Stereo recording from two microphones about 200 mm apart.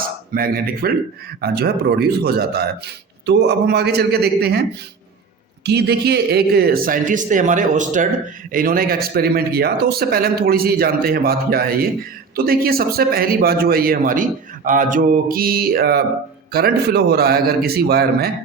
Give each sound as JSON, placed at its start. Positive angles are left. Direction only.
{"t": 0.3, "sound": "speech", "side_deg": -45}
{"t": 5.6, "sound": "speech", "side_deg": -55}